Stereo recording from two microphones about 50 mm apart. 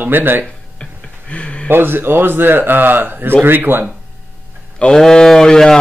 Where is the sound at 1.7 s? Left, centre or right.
Right.